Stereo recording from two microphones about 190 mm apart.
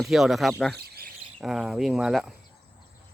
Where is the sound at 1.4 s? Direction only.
Centre (ahead or behind).